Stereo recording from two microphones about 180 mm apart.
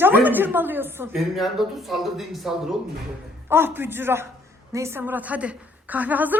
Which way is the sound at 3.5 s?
10° right (ahead or behind).